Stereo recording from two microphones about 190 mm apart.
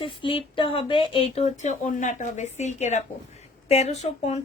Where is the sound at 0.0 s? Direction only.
25° left (ahead or behind).